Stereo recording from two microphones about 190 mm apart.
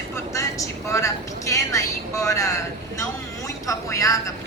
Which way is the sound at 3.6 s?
15° left (ahead or behind).